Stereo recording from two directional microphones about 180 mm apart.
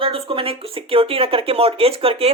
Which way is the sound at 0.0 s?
30° right (ahead or behind).